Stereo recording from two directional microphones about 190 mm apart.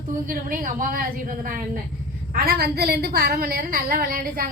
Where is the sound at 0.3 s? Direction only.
50° right (ahead or behind).